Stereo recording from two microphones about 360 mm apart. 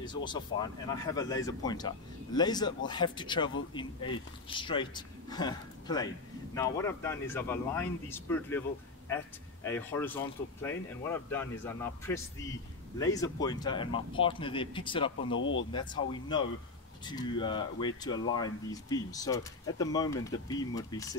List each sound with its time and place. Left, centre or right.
0.0 s speech: centre
9.7 s speech: centre
15.2 s speech: left
15.7 s speech: centre